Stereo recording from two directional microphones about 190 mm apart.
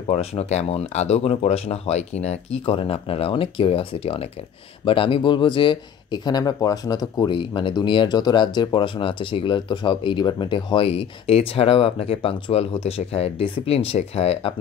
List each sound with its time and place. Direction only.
0.0 s a man's voice: 30° left (ahead or behind)